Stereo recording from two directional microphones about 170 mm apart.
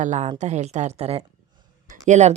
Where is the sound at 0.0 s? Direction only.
45° right (ahead or behind).